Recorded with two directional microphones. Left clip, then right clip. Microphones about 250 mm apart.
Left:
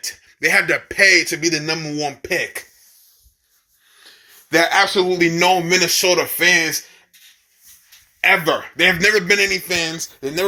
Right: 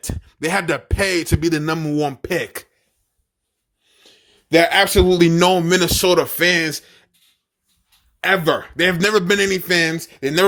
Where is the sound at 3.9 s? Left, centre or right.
Right.